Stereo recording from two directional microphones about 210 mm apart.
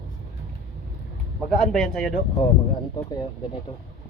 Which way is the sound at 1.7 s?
Centre (ahead or behind).